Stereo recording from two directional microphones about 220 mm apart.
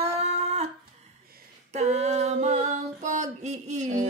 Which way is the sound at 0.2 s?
30° right (ahead or behind).